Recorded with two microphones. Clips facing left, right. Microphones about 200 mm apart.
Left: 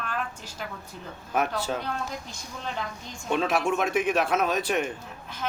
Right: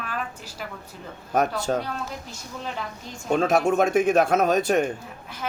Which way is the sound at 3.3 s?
45° right (ahead or behind).